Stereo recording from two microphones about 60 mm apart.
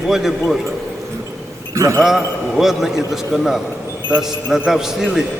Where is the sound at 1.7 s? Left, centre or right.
Right.